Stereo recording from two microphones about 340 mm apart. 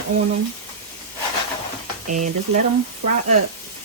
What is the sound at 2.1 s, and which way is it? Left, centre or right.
Speech, right.